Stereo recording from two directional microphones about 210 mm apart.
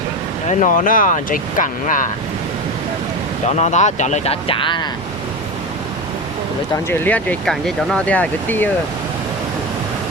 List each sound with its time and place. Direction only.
0.4 s speech: 40° left (ahead or behind)
3.4 s speech: 35° left (ahead or behind)
6.9 s speech: 10° left (ahead or behind)